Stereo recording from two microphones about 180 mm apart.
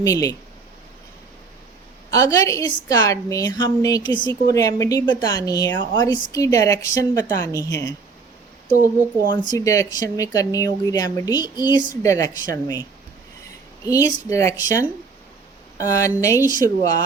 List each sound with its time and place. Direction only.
0.0 s speech: 20° left (ahead or behind)
2.0 s speech: 20° left (ahead or behind)
8.7 s speech: 45° right (ahead or behind)
9.3 s speech: 25° left (ahead or behind)